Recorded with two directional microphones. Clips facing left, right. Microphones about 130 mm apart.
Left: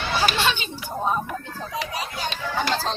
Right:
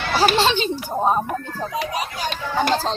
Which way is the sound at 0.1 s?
35° right (ahead or behind).